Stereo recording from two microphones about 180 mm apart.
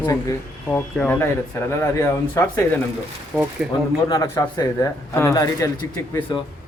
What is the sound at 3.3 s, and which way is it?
Speech, 10° right (ahead or behind).